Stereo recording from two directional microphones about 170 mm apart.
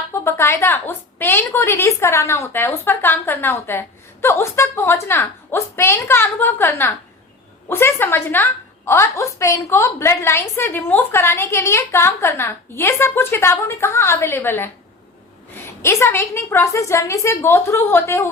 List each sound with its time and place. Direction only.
0.1 s a woman's voice: 15° left (ahead or behind)
15.8 s a woman's voice: 15° left (ahead or behind)